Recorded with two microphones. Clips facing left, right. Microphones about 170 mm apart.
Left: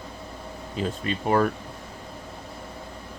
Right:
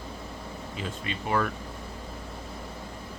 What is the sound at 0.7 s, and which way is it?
Speech, 35° left (ahead or behind).